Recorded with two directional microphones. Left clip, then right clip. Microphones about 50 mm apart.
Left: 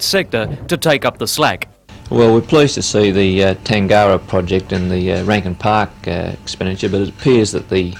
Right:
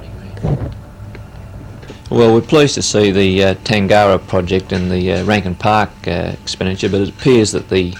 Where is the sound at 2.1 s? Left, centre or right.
Right.